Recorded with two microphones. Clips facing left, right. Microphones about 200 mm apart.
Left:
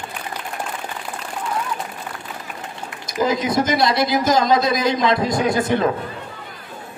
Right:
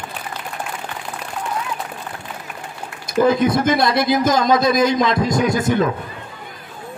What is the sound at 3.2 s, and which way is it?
Speech, 55° right (ahead or behind).